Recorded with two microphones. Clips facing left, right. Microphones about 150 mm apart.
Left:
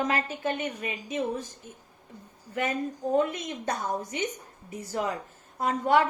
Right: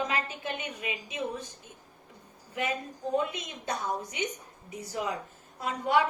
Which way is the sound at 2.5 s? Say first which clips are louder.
Left 4 dB; 45° left (ahead or behind).